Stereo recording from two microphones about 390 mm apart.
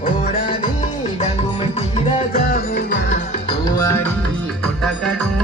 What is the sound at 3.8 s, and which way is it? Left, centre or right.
Music, centre.